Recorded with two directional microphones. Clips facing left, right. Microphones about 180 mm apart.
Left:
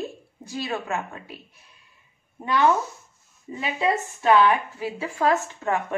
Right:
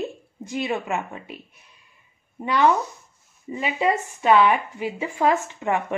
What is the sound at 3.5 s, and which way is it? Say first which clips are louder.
Speech: right 2 dB; 15° right (ahead or behind).